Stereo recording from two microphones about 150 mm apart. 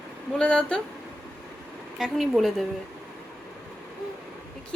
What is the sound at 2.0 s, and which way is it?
Speech, centre (ahead or behind).